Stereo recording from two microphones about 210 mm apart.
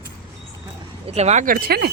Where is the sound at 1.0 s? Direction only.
30° right (ahead or behind); by 1.9 s 45° right (ahead or behind).